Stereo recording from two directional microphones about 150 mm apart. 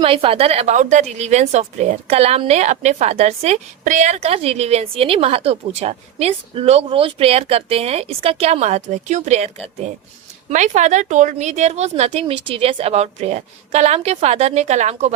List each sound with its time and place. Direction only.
0.0 s a woman's voice: 40° right (ahead or behind)
10.5 s a woman's voice: 55° right (ahead or behind)